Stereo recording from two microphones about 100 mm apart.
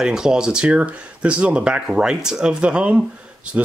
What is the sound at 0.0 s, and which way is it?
Speech, 5° right (ahead or behind).